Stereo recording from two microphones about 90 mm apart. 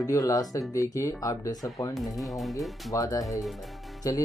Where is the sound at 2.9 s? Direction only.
40° left (ahead or behind).